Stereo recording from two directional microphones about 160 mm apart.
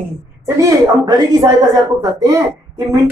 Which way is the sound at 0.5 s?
20° right (ahead or behind).